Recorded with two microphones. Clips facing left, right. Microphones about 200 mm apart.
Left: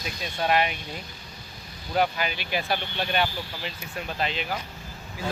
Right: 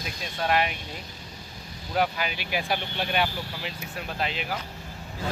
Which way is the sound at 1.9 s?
Centre (ahead or behind).